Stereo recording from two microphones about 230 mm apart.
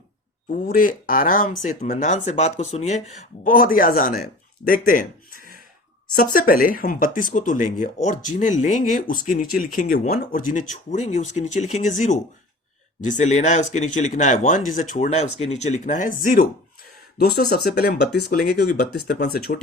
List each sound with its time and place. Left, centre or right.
0.5 s speech: left
6.1 s speech: left